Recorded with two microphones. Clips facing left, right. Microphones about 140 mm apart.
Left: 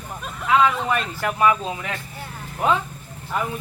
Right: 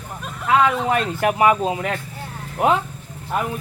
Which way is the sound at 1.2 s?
60° right (ahead or behind).